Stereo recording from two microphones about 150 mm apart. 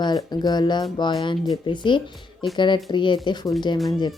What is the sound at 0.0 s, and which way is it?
Speech, 30° left (ahead or behind).